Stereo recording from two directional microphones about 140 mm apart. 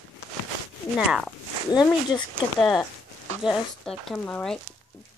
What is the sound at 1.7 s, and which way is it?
Speech, 30° left (ahead or behind).